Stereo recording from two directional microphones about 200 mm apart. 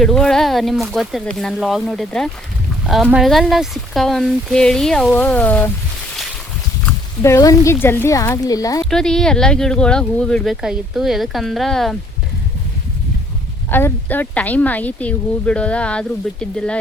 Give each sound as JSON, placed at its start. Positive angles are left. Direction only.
{"t": 0.0, "sound": "speech", "side_deg": 5}
{"t": 7.2, "sound": "speech", "side_deg": 15}
{"t": 8.8, "sound": "speech", "side_deg": 5}
{"t": 13.7, "sound": "speech", "side_deg": 10}